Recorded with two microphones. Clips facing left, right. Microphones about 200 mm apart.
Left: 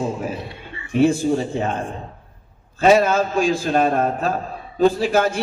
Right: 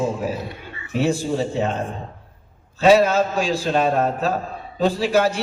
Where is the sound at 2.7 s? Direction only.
50° left (ahead or behind).